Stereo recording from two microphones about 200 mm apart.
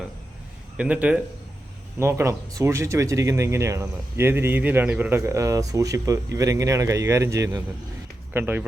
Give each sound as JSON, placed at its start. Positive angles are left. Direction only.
{"t": 0.8, "sound": "speech", "side_deg": -5}